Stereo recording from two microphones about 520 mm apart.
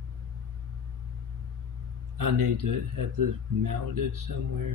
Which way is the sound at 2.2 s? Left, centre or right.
Right.